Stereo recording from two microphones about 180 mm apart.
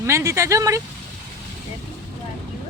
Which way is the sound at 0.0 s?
15° right (ahead or behind).